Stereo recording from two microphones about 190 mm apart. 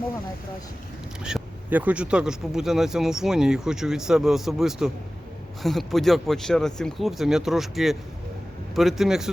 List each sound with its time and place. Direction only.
1.2 s speech: 5° right (ahead or behind)